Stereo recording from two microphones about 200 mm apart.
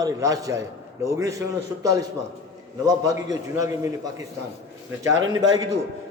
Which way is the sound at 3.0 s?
15° right (ahead or behind).